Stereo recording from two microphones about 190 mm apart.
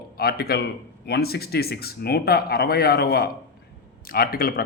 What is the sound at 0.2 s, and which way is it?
A man's voice, 55° left (ahead or behind).